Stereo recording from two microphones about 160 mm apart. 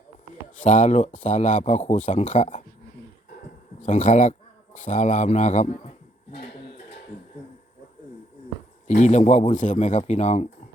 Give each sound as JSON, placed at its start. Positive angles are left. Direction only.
{"t": 0.5, "sound": "speech", "side_deg": 50}
{"t": 3.8, "sound": "a man's voice", "side_deg": 50}
{"t": 8.9, "sound": "speech", "side_deg": 50}